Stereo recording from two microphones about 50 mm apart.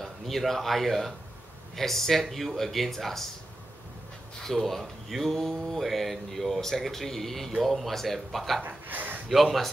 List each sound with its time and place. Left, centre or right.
0.0 s speech: centre
4.4 s speech: centre
8.6 s a sound: right
9.3 s speech: centre